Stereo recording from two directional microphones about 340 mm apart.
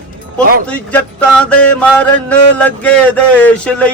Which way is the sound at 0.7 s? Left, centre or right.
Centre.